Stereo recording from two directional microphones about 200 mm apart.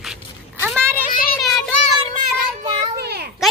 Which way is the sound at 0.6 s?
10° right (ahead or behind).